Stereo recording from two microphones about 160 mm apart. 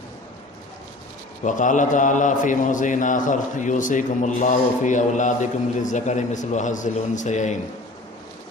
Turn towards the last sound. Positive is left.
turn(degrees=50)  # may be behind; listen again after turning